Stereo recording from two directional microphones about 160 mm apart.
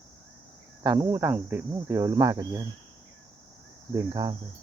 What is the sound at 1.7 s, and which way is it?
Speech, 20° right (ahead or behind).